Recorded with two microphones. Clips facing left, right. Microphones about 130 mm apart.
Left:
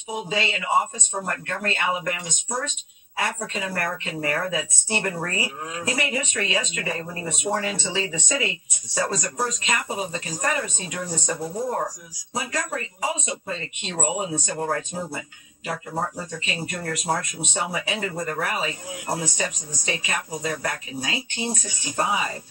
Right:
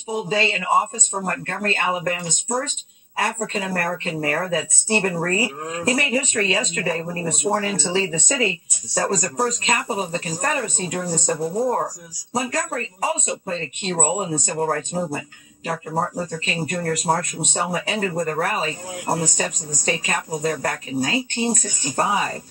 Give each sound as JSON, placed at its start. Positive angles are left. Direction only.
{"t": 0.3, "sound": "a woman's voice", "side_deg": -40}
{"t": 3.2, "sound": "a woman's voice", "side_deg": -40}